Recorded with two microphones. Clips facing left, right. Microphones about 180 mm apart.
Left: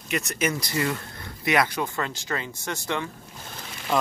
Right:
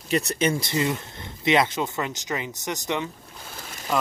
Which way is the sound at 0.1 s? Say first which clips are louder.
Right 4 dB; 35° right (ahead or behind).